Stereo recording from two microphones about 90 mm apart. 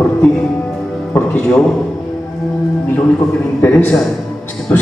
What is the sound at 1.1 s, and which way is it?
Speech, 10° left (ahead or behind).